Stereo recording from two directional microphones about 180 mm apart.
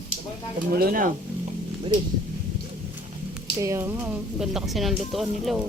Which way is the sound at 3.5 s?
15° right (ahead or behind).